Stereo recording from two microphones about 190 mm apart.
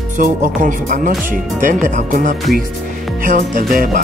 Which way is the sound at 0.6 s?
45° right (ahead or behind).